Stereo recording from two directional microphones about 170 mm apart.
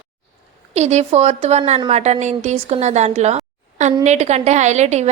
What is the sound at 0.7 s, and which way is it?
A woman's voice, 40° right (ahead or behind).